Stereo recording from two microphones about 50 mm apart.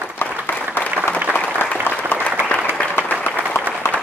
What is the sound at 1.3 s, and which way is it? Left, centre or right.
Applause, right.